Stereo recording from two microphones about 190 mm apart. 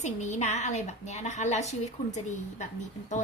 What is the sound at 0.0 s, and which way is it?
A woman's voice, 40° left (ahead or behind).